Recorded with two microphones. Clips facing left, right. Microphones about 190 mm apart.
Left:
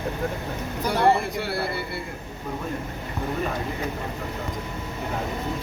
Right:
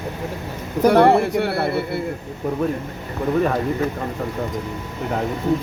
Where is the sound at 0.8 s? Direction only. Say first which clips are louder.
Right 8 dB; 60° right (ahead or behind).